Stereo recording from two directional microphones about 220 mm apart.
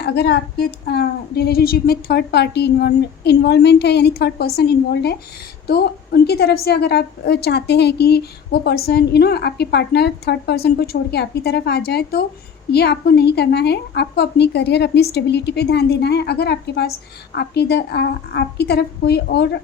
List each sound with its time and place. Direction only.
0.0 s a woman's voice: 50° left (ahead or behind)